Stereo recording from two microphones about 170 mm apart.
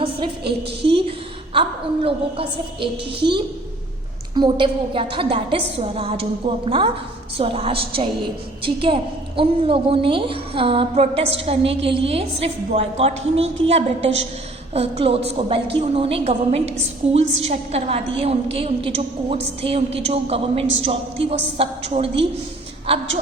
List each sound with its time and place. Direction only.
0.0 s a woman's voice: 30° right (ahead or behind)
4.4 s a woman's voice: 30° right (ahead or behind)